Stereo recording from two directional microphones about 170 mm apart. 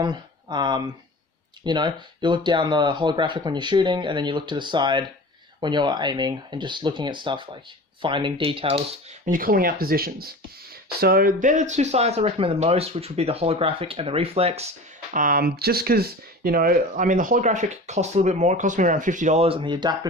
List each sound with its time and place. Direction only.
0.0 s speech: 25° right (ahead or behind)
9.2 s speech: 55° right (ahead or behind); by 14.7 s 35° right (ahead or behind)
15.1 s speech: 55° right (ahead or behind); by 20.0 s 25° right (ahead or behind)